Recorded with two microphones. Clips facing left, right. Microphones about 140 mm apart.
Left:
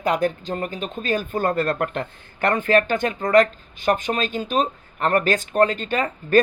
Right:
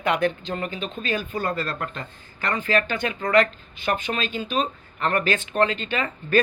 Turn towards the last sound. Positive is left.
turn(degrees=45)  # may be behind; listen again after turning